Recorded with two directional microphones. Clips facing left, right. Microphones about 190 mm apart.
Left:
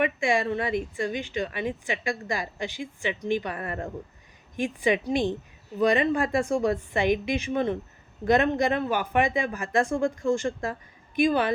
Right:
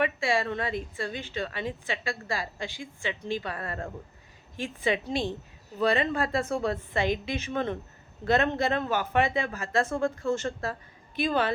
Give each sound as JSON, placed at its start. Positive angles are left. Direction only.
{"t": 0.0, "sound": "a woman's voice", "side_deg": 15}